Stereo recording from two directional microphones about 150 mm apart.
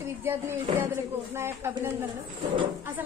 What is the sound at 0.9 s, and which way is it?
Speech, 15° right (ahead or behind).